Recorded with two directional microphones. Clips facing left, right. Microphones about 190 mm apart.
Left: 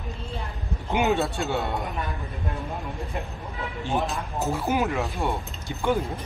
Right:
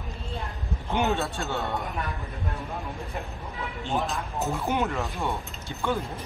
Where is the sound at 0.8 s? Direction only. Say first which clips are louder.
Left 3 dB; 15° left (ahead or behind).